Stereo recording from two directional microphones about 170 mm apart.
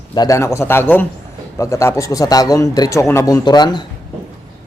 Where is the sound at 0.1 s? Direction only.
20° left (ahead or behind).